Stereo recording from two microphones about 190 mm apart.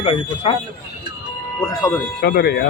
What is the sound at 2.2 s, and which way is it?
Speech, 60° left (ahead or behind).